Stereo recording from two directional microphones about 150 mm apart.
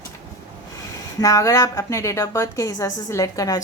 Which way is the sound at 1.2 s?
25° left (ahead or behind).